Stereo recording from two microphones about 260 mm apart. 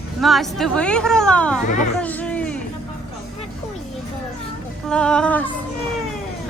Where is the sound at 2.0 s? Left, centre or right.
Centre.